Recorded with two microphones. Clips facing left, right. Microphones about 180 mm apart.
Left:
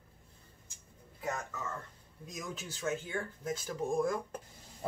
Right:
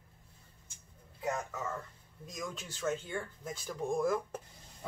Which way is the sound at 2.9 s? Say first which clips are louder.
Left 1 dB; 5° left (ahead or behind).